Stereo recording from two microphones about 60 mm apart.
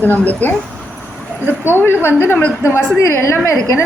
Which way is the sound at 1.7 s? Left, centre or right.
Left.